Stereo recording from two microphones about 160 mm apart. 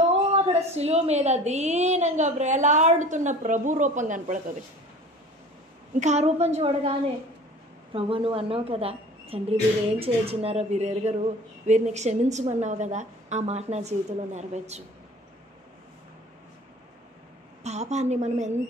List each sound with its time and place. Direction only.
0.0 s a sound: 40° right (ahead or behind)
0.7 s a woman's voice: 40° right (ahead or behind)
5.9 s a woman's voice: 45° right (ahead or behind)
7.9 s a woman's voice: 35° right (ahead or behind)
17.6 s a woman's voice: 45° right (ahead or behind)